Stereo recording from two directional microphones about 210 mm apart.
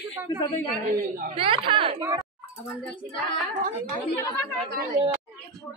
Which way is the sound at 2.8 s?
5° left (ahead or behind).